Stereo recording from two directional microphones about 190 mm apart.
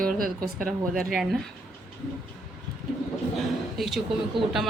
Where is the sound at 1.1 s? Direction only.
Centre (ahead or behind).